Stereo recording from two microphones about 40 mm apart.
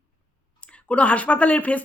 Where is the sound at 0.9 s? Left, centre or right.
Left.